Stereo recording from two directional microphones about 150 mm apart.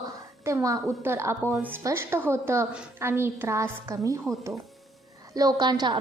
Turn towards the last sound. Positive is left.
turn(degrees=-30)  # may be behind; listen again after turning